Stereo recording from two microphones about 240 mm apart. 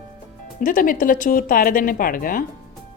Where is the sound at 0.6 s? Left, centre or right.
Left.